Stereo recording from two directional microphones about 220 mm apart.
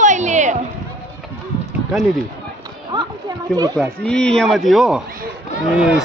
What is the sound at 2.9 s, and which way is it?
Speech, 15° right (ahead or behind).